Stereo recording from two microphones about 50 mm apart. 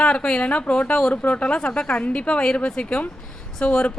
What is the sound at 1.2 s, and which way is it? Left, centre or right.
Speech, left.